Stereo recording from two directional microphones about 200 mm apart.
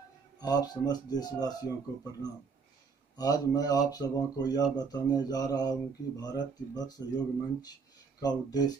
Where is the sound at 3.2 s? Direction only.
20° left (ahead or behind).